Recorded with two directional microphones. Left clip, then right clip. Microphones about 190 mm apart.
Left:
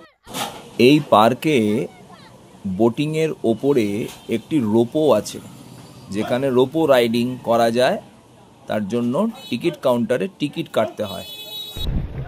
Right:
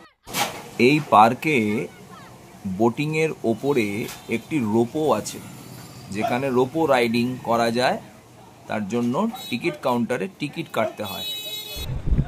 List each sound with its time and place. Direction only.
0.7 s speech: 20° left (ahead or behind)